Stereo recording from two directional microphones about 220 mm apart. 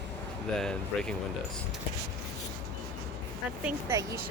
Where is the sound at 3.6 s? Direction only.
10° right (ahead or behind).